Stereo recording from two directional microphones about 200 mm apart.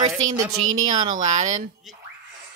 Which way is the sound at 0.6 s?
90° right.